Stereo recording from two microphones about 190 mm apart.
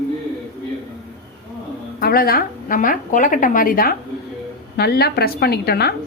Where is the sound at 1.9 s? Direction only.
50° left (ahead or behind).